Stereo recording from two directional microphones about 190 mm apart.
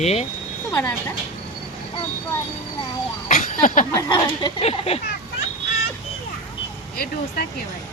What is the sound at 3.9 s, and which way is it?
Speech, 15° left (ahead or behind).